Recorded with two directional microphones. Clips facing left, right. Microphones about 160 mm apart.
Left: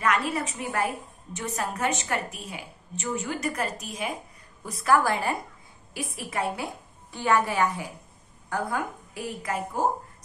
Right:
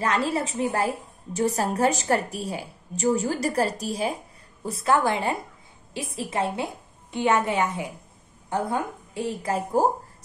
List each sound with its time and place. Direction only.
0.0 s a woman's voice: 30° right (ahead or behind)